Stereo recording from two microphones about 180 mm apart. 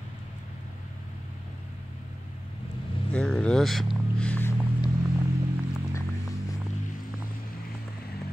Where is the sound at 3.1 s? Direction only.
5° left (ahead or behind).